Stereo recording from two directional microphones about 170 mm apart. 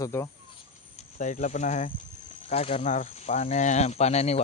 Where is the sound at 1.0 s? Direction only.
45° left (ahead or behind).